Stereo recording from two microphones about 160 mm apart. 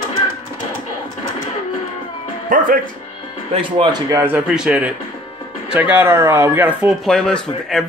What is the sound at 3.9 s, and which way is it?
Speech, 20° right (ahead or behind).